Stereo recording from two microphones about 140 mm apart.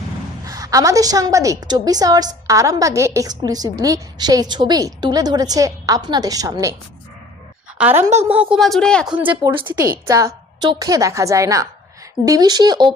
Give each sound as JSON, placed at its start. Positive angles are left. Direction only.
{"t": 0.4, "sound": "a woman's voice", "side_deg": -25}
{"t": 7.8, "sound": "a woman's voice", "side_deg": -10}
{"t": 8.4, "sound": "speech", "side_deg": 0}
{"t": 9.6, "sound": "a woman's voice", "side_deg": -35}
{"t": 10.1, "sound": "a woman's voice", "side_deg": -25}